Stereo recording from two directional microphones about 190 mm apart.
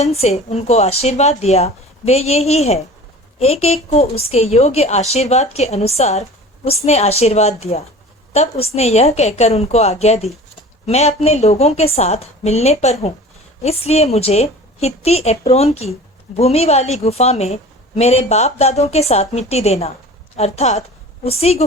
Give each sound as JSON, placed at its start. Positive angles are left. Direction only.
{"t": 0.0, "sound": "a woman's voice", "side_deg": 35}